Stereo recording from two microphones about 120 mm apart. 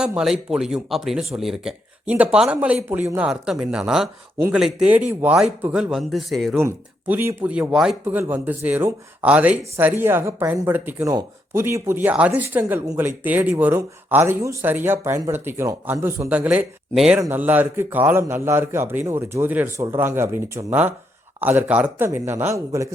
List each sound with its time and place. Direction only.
0.0 s speech: 5° right (ahead or behind)
6.6 s speech: 20° right (ahead or behind)
8.0 s speech: 15° right (ahead or behind)
16.9 s speech: centre (ahead or behind)
17.2 s a man's voice: 20° right (ahead or behind)